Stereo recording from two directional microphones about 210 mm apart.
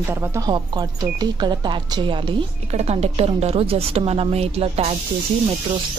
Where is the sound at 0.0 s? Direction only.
10° right (ahead or behind); by 4.9 s 30° right (ahead or behind).